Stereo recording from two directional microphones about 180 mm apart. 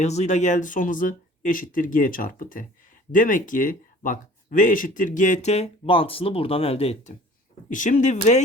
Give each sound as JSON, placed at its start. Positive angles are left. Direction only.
{"t": 0.0, "sound": "speech", "side_deg": 40}